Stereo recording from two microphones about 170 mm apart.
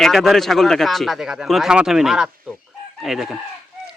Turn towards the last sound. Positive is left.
turn(degrees=0)  # may be behind; listen again after turning